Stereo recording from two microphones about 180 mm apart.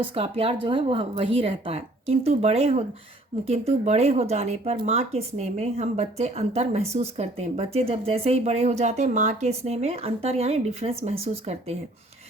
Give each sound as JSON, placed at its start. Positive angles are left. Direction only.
{"t": 0.0, "sound": "speech", "side_deg": -30}
{"t": 3.8, "sound": "speech", "side_deg": -35}